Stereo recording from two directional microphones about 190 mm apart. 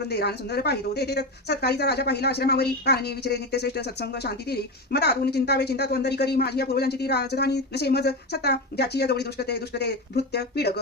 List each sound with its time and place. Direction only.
0.1 s speech: 60° left (ahead or behind)